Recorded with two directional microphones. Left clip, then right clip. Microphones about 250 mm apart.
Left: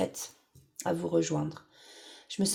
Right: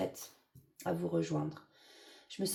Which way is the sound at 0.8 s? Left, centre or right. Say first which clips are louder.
Left 6 dB; left.